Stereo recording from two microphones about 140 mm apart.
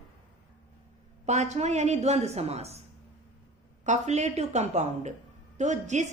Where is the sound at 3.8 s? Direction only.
55° right (ahead or behind).